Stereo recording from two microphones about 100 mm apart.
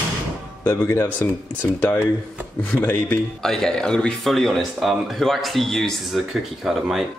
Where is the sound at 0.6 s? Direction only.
20° left (ahead or behind).